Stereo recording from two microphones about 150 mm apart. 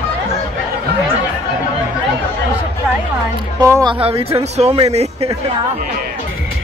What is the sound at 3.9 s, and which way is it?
Speech, 40° right (ahead or behind).